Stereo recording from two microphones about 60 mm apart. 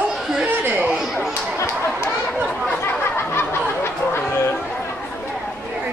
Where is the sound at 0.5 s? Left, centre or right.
Right.